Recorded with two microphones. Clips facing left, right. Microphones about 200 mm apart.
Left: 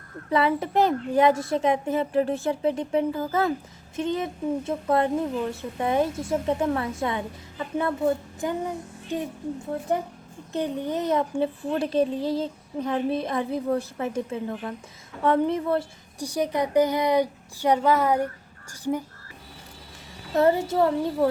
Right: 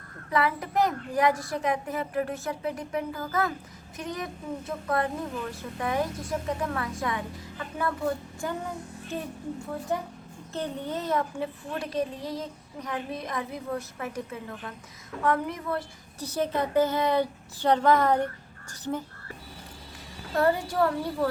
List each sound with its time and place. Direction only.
0.3 s speech: 25° left (ahead or behind)
10.5 s a woman's voice: 15° left (ahead or behind)
16.2 s a woman's voice: 15° left (ahead or behind)
20.3 s speech: 20° left (ahead or behind)